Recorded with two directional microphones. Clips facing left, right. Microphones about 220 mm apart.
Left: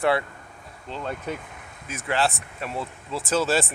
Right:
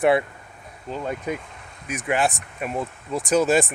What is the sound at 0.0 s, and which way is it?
Speech, 20° right (ahead or behind).